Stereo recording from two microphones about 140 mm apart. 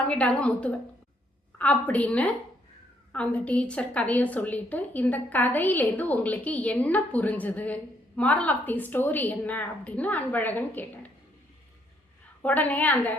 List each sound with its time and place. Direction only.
0.1 s a woman's voice: 10° left (ahead or behind)
12.4 s a woman's voice: 10° left (ahead or behind)